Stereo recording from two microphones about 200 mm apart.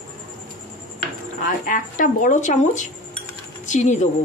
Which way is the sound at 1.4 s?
40° left (ahead or behind).